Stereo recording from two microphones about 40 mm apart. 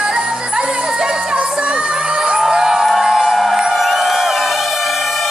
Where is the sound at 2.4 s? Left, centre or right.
Centre.